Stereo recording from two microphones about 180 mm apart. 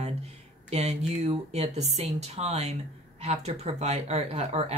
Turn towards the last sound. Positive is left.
turn(degrees=-40)  # may be behind; listen again after turning